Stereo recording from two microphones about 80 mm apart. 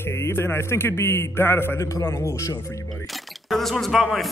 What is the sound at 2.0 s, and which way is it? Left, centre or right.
Speech, left.